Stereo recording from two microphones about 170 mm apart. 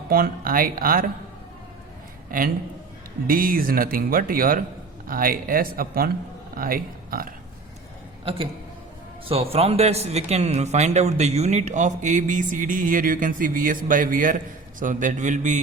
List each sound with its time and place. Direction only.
0.1 s speech: 60° right (ahead or behind)
2.3 s speech: 55° right (ahead or behind)
8.2 s a man's voice: 30° right (ahead or behind)